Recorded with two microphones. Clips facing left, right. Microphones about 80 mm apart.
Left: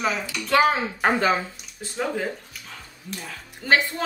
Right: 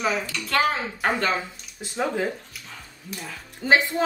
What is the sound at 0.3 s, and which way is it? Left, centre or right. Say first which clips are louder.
Speech: left 4 dB; centre.